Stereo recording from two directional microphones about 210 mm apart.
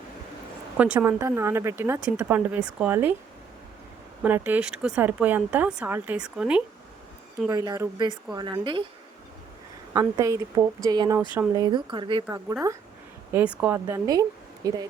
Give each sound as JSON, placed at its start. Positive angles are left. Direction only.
{"t": 0.8, "sound": "speech", "side_deg": -10}
{"t": 4.2, "sound": "speech", "side_deg": -10}
{"t": 7.4, "sound": "speech", "side_deg": -15}
{"t": 9.9, "sound": "speech", "side_deg": -15}
{"t": 13.3, "sound": "speech", "side_deg": -5}